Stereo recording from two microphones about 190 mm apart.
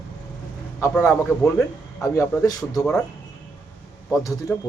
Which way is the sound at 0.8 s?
15° left (ahead or behind).